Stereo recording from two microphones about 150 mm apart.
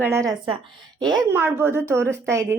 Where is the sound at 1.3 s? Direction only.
15° right (ahead or behind).